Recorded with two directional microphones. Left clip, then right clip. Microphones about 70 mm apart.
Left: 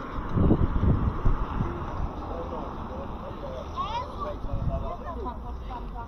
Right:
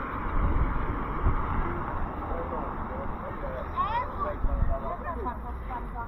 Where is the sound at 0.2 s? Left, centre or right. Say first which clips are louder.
Left 5 dB; left.